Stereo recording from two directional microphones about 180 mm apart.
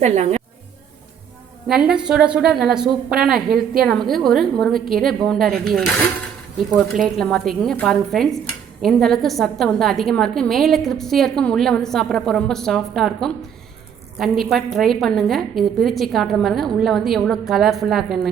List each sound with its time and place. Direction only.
0.0 s a woman's voice: 40° right (ahead or behind)
1.6 s a woman's voice: 5° right (ahead or behind)
7.0 s a woman's voice: centre (ahead or behind)